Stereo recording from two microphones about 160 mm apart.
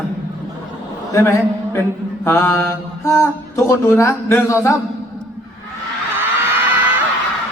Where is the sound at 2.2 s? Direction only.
15° left (ahead or behind).